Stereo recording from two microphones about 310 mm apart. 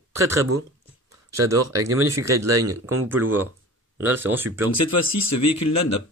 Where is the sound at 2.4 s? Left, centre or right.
Right.